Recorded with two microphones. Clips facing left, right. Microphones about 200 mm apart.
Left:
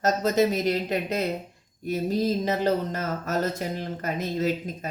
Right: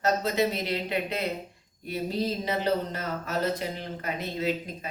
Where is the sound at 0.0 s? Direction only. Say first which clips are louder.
Left 3 dB; 45° left (ahead or behind).